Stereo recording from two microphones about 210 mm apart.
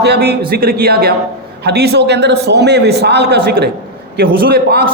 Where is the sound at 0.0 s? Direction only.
50° right (ahead or behind).